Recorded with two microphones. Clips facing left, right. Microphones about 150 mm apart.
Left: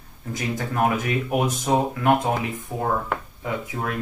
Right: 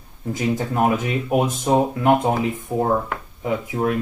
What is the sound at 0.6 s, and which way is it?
Speech, 20° right (ahead or behind).